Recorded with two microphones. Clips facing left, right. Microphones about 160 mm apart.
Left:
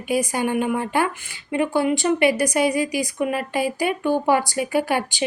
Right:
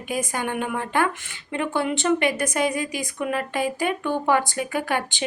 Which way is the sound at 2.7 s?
50° right (ahead or behind).